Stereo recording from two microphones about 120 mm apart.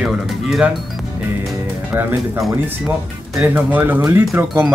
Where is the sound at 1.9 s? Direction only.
20° right (ahead or behind).